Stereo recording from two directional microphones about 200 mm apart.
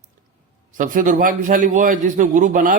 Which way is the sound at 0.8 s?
40° right (ahead or behind).